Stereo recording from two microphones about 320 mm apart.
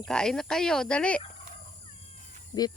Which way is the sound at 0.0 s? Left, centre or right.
Centre.